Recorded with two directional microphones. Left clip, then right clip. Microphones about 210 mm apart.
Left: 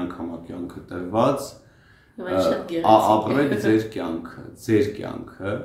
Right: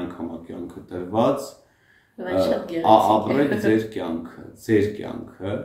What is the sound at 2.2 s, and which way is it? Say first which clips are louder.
Speech: even; 5° right (ahead or behind).